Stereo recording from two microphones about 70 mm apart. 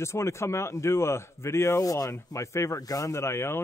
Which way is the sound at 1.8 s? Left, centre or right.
Left.